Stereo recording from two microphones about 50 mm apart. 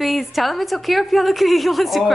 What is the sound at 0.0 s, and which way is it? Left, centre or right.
A woman's voice, centre.